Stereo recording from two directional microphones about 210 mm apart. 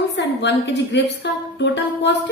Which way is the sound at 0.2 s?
55° left (ahead or behind).